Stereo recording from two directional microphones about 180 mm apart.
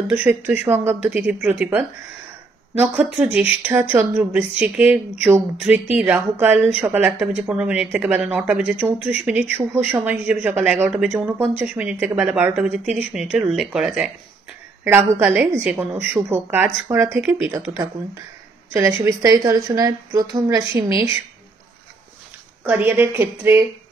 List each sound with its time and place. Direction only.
0.1 s speech: 10° right (ahead or behind)
18.7 s a woman's voice: 10° right (ahead or behind)
22.6 s speech: 10° right (ahead or behind)